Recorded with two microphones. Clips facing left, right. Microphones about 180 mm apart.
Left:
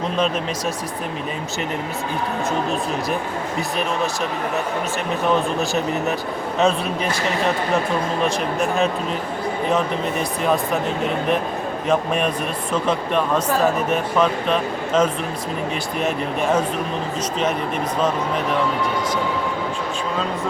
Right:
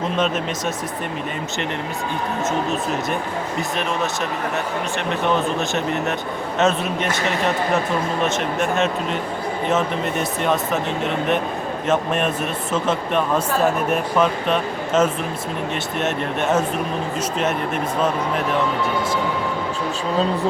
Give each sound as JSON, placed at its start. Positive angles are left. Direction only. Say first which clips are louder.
{"t": 5.2, "sound": "speech", "louder": "left 1 dB", "side_deg": 0}